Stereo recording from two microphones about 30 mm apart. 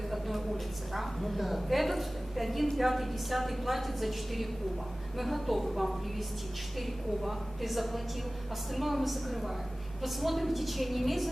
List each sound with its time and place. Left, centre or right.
0.1 s a woman's voice: centre